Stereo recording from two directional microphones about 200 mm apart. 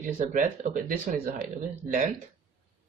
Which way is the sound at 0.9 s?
45° right (ahead or behind).